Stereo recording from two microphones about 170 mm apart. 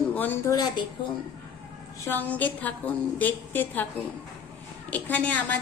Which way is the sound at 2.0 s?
10° left (ahead or behind).